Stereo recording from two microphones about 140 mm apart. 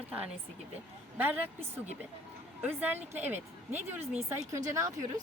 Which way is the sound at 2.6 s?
10° right (ahead or behind).